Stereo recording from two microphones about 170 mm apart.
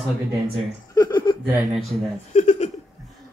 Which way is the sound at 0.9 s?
25° left (ahead or behind).